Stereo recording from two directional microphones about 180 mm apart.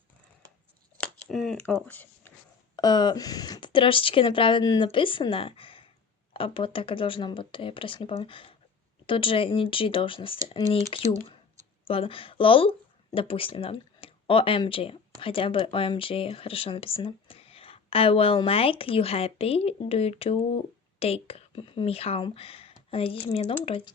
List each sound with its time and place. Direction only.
1.0 s a sound: 5° left (ahead or behind)
1.6 s speech: 10° left (ahead or behind)
2.7 s speech: 25° left (ahead or behind)